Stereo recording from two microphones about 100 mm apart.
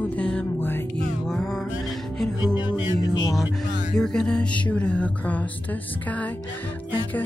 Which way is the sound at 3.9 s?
5° left (ahead or behind).